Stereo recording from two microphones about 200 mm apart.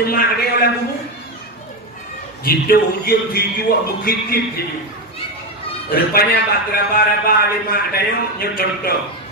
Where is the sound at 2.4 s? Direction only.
50° left (ahead or behind).